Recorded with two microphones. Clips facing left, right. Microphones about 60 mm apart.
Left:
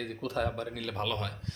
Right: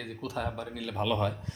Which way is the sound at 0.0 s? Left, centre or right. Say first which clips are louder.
Left 2 dB; centre.